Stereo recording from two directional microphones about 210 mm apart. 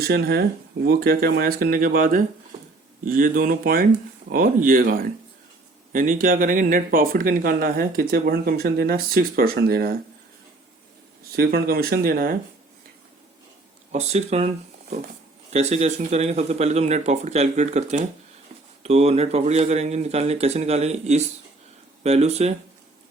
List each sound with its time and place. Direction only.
0.0 s speech: 50° right (ahead or behind)
11.3 s speech: 45° right (ahead or behind)
13.9 s speech: 30° right (ahead or behind)